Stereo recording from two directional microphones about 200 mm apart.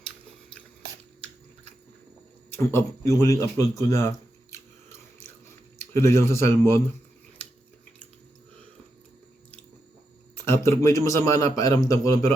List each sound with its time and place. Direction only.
2.7 s a man's voice: 15° left (ahead or behind)
5.8 s a man's voice: 10° left (ahead or behind)
10.4 s a man's voice: 15° left (ahead or behind)